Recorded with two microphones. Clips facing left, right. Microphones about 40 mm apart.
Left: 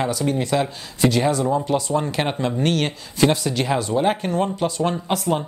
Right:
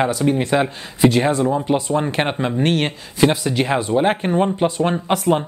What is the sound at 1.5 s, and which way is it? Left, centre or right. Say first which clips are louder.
Speech: right 2 dB; centre.